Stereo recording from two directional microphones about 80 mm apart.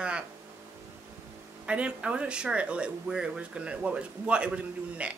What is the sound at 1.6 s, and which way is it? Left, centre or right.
Speech, centre.